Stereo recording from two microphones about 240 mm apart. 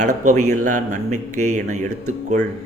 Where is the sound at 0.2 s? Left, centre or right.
Right.